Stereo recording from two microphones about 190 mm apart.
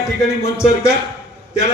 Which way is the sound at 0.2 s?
15° left (ahead or behind).